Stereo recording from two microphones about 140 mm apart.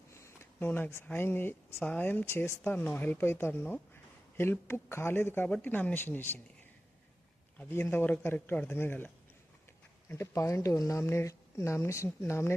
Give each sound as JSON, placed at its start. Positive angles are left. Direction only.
{"t": 0.1, "sound": "a sound", "side_deg": 20}
{"t": 1.0, "sound": "speech", "side_deg": 15}
{"t": 7.6, "sound": "speech", "side_deg": 15}
{"t": 10.2, "sound": "speech", "side_deg": 20}